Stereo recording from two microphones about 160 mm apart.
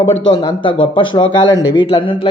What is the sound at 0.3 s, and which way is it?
A man's voice, 30° left (ahead or behind).